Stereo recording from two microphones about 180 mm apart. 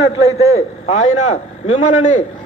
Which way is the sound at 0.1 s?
35° left (ahead or behind).